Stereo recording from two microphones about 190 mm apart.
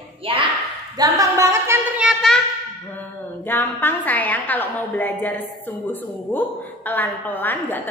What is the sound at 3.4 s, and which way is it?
A woman's voice, 10° left (ahead or behind).